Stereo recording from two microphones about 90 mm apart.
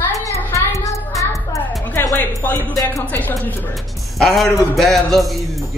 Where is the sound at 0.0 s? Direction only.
35° left (ahead or behind).